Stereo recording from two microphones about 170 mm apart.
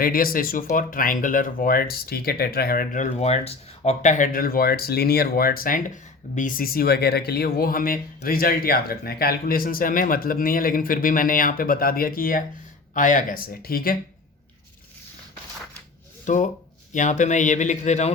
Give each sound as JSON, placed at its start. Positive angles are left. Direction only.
{"t": 0.0, "sound": "speech", "side_deg": 60}
{"t": 16.2, "sound": "speech", "side_deg": 50}